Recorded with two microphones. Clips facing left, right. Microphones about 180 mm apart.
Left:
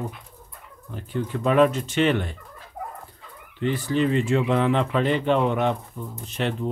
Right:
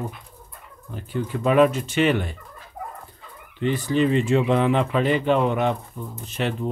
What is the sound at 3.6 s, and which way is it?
Speech, 20° right (ahead or behind).